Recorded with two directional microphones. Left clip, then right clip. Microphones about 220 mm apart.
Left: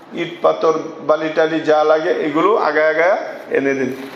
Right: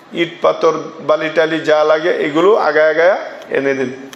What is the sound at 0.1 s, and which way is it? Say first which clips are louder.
A man's voice: right 2 dB; 45° right (ahead or behind).